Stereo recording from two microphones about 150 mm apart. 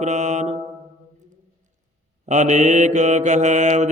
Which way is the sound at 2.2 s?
50° right (ahead or behind).